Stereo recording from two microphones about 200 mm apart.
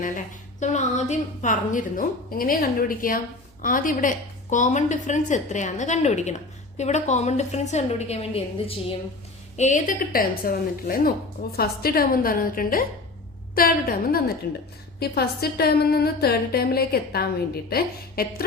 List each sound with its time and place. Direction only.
0.6 s a woman's voice: 35° left (ahead or behind)